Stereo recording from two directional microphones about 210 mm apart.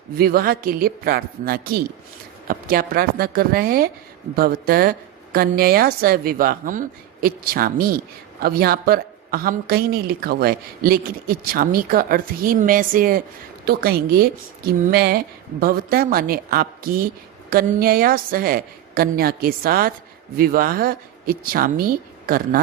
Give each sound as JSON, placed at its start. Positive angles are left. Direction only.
{"t": 0.2, "sound": "speech", "side_deg": -45}